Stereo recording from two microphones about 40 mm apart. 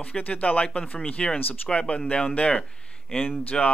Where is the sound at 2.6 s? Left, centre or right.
Left.